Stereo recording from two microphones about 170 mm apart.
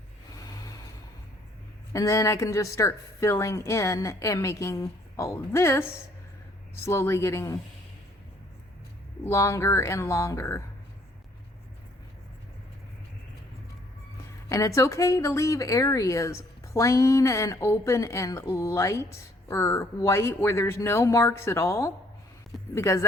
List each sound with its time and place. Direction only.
1.9 s a woman's voice: 20° left (ahead or behind)
9.2 s a woman's voice: 15° left (ahead or behind)
14.5 s a woman's voice: 20° left (ahead or behind)